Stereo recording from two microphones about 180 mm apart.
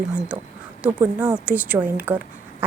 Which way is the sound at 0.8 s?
10° right (ahead or behind).